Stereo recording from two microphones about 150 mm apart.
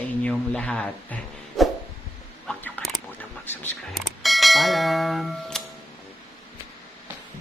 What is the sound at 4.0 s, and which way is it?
Bell, centre (ahead or behind).